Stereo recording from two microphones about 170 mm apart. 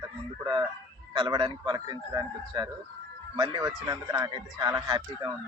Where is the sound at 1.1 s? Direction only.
25° right (ahead or behind).